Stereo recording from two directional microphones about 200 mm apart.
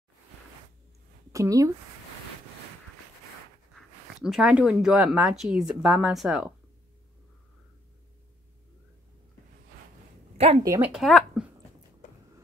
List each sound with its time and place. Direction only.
1.3 s speech: 15° right (ahead or behind)
3.7 s speech: centre (ahead or behind)
10.3 s speech: 30° right (ahead or behind)
10.6 s speech: 15° right (ahead or behind)
10.9 s speech: centre (ahead or behind)